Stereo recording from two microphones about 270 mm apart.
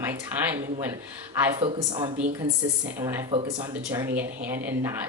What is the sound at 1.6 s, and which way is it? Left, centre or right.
Speech, centre.